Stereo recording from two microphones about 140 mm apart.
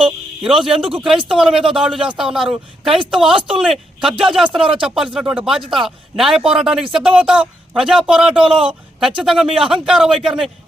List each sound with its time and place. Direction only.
0.0 s a sound: 5° right (ahead or behind)
1.0 s speech: 35° right (ahead or behind)
1.3 s speech: 5° right (ahead or behind)
4.6 s speech: 40° right (ahead or behind)
4.9 s speech: 5° right (ahead or behind)
8.3 s speech: 35° right (ahead or behind)
8.5 s speech: 5° right (ahead or behind)